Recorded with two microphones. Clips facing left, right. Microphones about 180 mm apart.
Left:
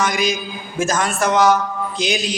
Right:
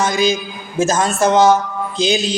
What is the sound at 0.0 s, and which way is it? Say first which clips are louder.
A man's voice: right 3 dB; 25° right (ahead or behind).